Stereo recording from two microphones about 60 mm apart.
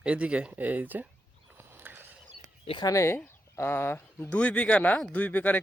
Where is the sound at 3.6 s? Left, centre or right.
Left.